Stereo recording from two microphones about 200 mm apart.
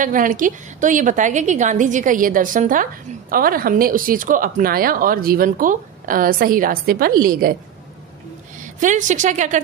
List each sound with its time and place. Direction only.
0.0 s a woman's voice: 40° right (ahead or behind)
8.7 s speech: 40° right (ahead or behind)